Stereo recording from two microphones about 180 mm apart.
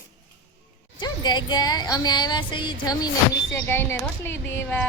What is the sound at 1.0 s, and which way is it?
A woman's voice, 25° left (ahead or behind).